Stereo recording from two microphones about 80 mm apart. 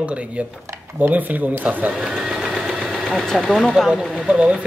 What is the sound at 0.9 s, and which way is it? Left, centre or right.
Speech, right.